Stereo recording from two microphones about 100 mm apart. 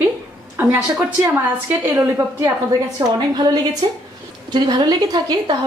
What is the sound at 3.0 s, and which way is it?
A woman's voice, 40° right (ahead or behind).